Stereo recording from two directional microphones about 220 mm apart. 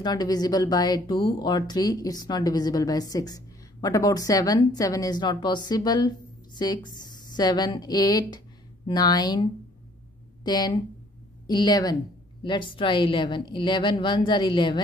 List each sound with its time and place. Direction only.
0.0 s a woman's voice: 15° left (ahead or behind)